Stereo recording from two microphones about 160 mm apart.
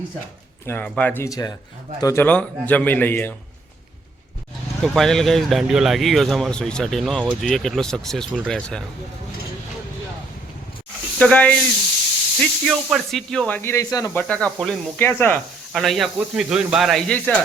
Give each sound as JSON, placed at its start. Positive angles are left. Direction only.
{"t": 0.7, "sound": "speech", "side_deg": 10}
{"t": 2.2, "sound": "speech", "side_deg": 10}
{"t": 4.8, "sound": "speech", "side_deg": 0}
{"t": 11.2, "sound": "speech", "side_deg": 10}
{"t": 13.6, "sound": "speech", "side_deg": 20}
{"t": 15.7, "sound": "speech", "side_deg": 0}